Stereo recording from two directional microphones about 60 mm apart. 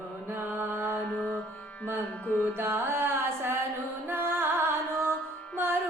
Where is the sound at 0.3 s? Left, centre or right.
Right.